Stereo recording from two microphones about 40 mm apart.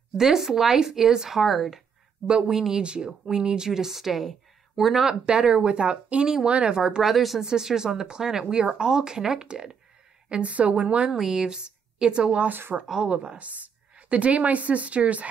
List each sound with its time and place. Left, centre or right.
0.2 s speech: centre
2.2 s a woman's voice: right
2.5 s speech: centre
2.8 s a woman's voice: right; by 5.0 s centre
5.2 s a woman's voice: right
7.0 s a woman's voice: centre; by 11.0 s right
11.1 s a woman's voice: centre
12.4 s speech: right
13.1 s a woman's voice: right